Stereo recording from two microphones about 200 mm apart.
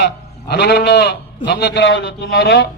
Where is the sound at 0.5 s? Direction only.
55° left (ahead or behind).